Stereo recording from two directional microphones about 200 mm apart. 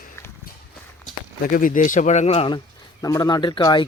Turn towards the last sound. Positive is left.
turn(degrees=20)  # may be behind; listen again after turning